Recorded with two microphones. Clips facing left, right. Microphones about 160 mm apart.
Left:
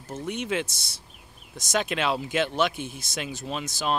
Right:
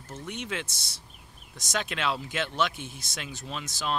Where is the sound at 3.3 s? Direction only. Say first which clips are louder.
Left 3 dB; 45° left (ahead or behind).